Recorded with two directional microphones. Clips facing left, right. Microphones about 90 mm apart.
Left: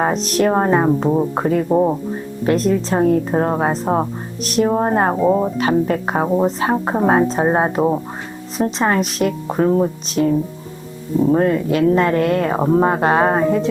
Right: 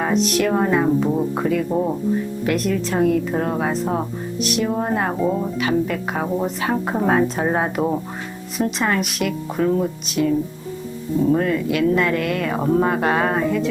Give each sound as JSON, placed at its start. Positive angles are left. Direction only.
{"t": 0.0, "sound": "speech", "side_deg": 35}
{"t": 1.7, "sound": "speech", "side_deg": 25}